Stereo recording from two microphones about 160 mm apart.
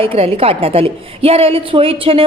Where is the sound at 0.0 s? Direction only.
35° right (ahead or behind).